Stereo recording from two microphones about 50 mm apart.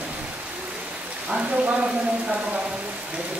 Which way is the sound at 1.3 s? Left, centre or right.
Right.